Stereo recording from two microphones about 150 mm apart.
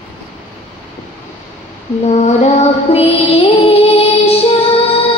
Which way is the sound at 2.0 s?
50° left (ahead or behind).